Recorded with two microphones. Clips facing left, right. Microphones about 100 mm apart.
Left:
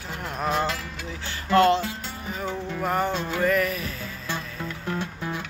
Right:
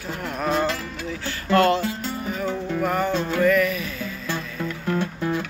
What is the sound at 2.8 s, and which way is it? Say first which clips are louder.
Music: right 1 dB; 30° left (ahead or behind).